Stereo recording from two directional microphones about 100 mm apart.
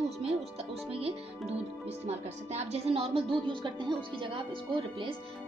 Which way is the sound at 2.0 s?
90° right.